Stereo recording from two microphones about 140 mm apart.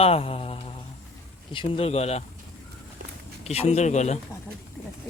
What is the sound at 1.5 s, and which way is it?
Speech, 45° left (ahead or behind).